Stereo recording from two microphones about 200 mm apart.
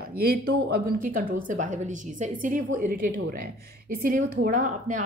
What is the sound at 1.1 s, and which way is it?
A woman's voice, 40° right (ahead or behind).